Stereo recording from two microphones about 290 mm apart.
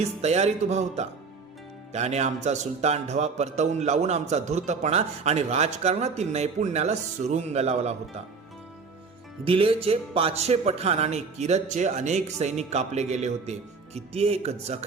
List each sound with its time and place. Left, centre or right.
0.0 s a man's voice: right
9.4 s a man's voice: centre